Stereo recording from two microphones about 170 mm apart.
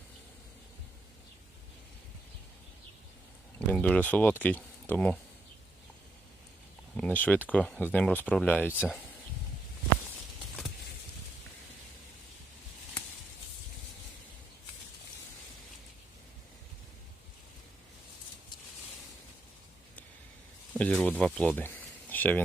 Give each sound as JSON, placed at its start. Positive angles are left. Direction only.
{"t": 3.7, "sound": "speech", "side_deg": 10}
{"t": 6.9, "sound": "speech", "side_deg": 10}
{"t": 20.7, "sound": "speech", "side_deg": 5}
{"t": 22.1, "sound": "a sound", "side_deg": 10}